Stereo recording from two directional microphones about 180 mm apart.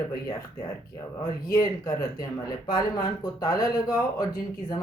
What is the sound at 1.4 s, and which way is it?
Speech, 20° left (ahead or behind).